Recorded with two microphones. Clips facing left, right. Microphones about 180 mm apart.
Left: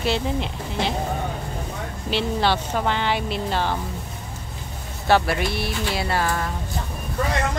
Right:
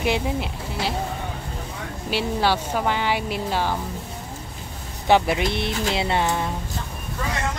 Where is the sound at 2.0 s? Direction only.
10° right (ahead or behind).